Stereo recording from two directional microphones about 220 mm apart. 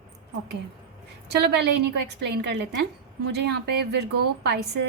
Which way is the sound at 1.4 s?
50° right (ahead or behind).